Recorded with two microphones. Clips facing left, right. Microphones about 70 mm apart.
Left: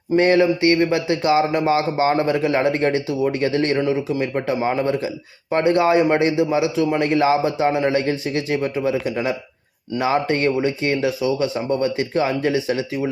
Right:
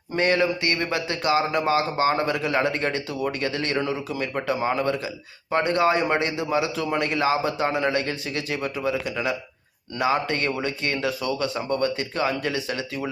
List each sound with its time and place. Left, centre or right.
0.2 s a man's voice: left
7.0 s a man's voice: left